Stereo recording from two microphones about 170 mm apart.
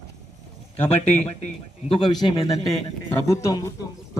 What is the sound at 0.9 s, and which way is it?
Speech, 35° left (ahead or behind).